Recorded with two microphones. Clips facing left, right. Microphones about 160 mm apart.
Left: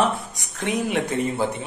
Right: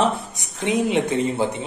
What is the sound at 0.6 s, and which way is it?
Speech, 25° right (ahead or behind).